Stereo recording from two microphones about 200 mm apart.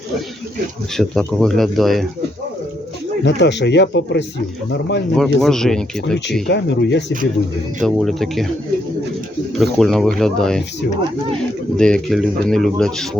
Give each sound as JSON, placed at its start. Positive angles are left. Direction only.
{"t": 0.9, "sound": "speech", "side_deg": 5}
{"t": 3.2, "sound": "speech", "side_deg": 60}
{"t": 5.1, "sound": "speech", "side_deg": 0}
{"t": 6.5, "sound": "speech", "side_deg": 60}
{"t": 7.8, "sound": "speech", "side_deg": 0}
{"t": 9.7, "sound": "speech", "side_deg": 0}
{"t": 11.8, "sound": "speech", "side_deg": 0}